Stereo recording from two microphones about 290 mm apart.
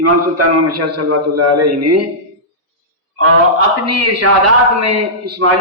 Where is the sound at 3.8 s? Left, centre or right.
Right.